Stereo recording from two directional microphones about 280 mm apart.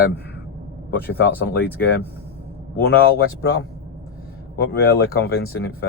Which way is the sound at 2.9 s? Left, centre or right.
Left.